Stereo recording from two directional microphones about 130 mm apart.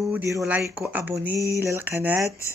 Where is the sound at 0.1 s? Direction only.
20° right (ahead or behind).